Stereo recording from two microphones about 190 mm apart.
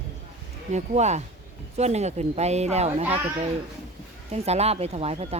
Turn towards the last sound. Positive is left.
turn(degrees=-30)  # may be behind; listen again after turning